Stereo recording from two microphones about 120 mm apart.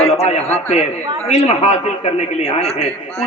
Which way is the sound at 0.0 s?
60° left (ahead or behind).